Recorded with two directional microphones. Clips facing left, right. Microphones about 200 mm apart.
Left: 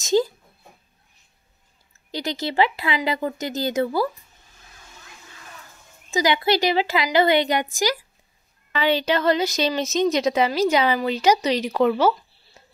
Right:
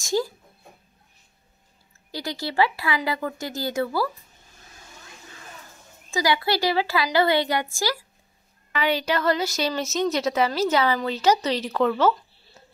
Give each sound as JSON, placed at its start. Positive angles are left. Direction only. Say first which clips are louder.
{"t": 0.0, "sound": "speech", "louder": "left 5 dB", "side_deg": 20}
{"t": 2.0, "sound": "speech", "louder": "left 4 dB", "side_deg": 20}
{"t": 6.0, "sound": "a woman's voice", "louder": "left 3 dB", "side_deg": 20}